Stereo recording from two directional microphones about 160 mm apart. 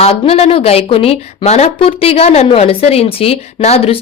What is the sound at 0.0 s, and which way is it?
A woman's voice, 40° left (ahead or behind).